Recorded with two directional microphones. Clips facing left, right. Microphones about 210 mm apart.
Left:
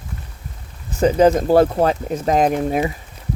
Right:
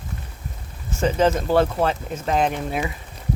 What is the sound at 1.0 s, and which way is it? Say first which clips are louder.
Speech: left 6 dB; 40° left (ahead or behind).